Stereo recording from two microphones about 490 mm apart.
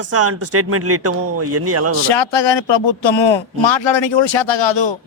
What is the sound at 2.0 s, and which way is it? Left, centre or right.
A woman's voice, left.